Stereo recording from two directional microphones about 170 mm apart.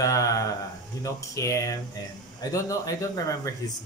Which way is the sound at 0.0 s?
20° left (ahead or behind).